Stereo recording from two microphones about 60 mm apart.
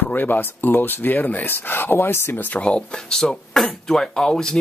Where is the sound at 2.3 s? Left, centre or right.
Left.